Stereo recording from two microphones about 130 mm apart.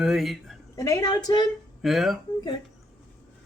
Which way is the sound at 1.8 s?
Centre (ahead or behind).